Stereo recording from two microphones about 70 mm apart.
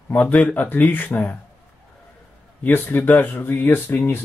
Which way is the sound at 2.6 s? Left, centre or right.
Left.